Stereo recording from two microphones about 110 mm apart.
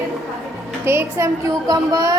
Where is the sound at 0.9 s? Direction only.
25° right (ahead or behind).